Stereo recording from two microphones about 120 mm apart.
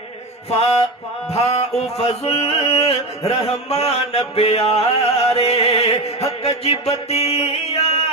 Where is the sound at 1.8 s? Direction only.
60° left (ahead or behind).